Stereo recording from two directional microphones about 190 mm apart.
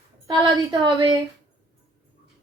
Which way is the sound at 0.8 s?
25° right (ahead or behind).